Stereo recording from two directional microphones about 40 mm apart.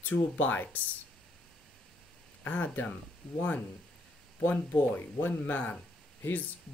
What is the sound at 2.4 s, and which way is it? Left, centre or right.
Speech, left.